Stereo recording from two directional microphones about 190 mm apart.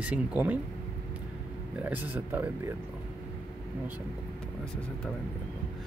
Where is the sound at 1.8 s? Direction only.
10° right (ahead or behind).